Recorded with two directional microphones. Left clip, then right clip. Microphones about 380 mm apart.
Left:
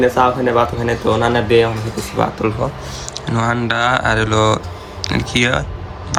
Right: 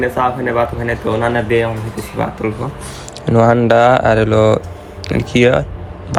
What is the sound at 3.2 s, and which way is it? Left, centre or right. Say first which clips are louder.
Speech: right 7 dB; centre.